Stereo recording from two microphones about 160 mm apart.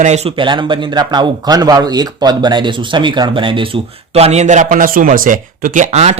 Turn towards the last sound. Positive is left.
turn(degrees=-45)  # may be behind; listen again after turning